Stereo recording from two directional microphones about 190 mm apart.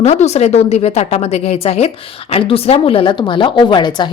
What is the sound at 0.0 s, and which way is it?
Speech, 35° left (ahead or behind).